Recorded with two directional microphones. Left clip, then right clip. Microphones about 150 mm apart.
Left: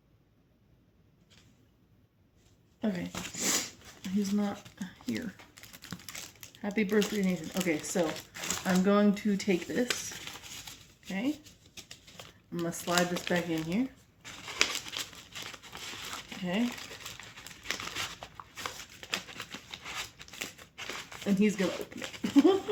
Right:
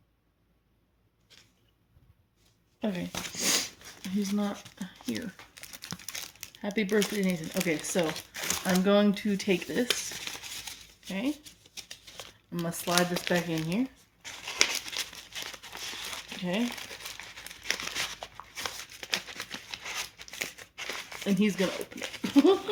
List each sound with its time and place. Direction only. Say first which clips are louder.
2.8 s speech: right 2 dB; 40° right (ahead or behind)
3.3 s sniff: right 3 dB; 30° right (ahead or behind)
4.2 s speech: right 1 dB; 40° right (ahead or behind)
7.9 s crumpling: right 2 dB; 50° right (ahead or behind)
8.8 s speech: right 2 dB; 25° right (ahead or behind); by 11.3 s 40° right (ahead or behind)
11.7 s crumpling: right 5 dB; 40° right (ahead or behind)
21.6 s speech: right 2 dB; 50° right (ahead or behind)
21.8 s a sound: right 3 dB; 50° right (ahead or behind)
22.2 s speech: right 2 dB; 40° right (ahead or behind)